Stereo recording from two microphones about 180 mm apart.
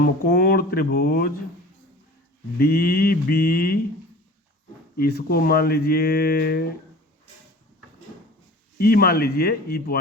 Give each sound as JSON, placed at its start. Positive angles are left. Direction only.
{"t": 0.0, "sound": "speech", "side_deg": 55}
{"t": 2.6, "sound": "speech", "side_deg": 60}
{"t": 4.9, "sound": "speech", "side_deg": 60}
{"t": 8.8, "sound": "speech", "side_deg": 55}